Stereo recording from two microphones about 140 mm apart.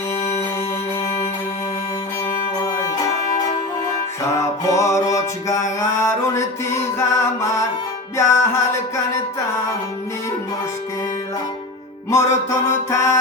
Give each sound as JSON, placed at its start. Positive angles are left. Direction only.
{"t": 2.6, "sound": "music", "side_deg": 25}
{"t": 4.4, "sound": "music", "side_deg": 20}
{"t": 12.1, "sound": "music", "side_deg": 20}